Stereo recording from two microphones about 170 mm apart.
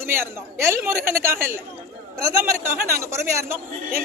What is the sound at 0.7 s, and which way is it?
Speech, 15° right (ahead or behind).